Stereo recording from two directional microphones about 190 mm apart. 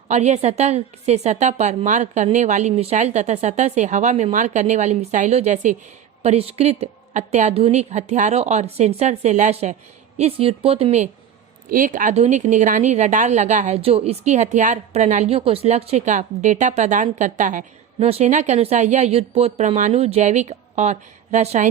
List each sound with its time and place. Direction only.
0.1 s a woman's voice: 35° right (ahead or behind)